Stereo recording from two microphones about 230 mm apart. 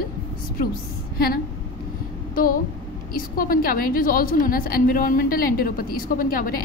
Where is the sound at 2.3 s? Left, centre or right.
Left.